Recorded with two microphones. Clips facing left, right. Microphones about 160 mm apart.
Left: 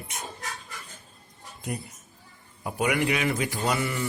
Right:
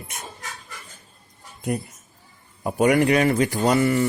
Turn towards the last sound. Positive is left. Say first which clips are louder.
# right 8 dB
turn(degrees=-45)  # may be behind; listen again after turning